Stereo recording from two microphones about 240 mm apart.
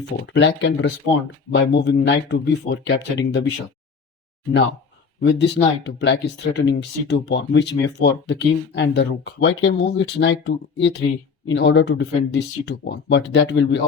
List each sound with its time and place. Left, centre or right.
0.3 s speech: left
5.2 s speech: left